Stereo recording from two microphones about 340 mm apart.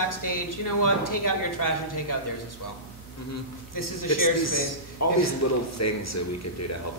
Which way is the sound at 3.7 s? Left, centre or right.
Left.